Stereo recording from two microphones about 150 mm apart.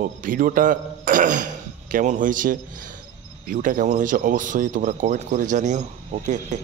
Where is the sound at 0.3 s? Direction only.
65° right (ahead or behind).